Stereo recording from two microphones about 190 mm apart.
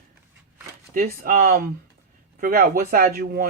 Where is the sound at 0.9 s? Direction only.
50° right (ahead or behind).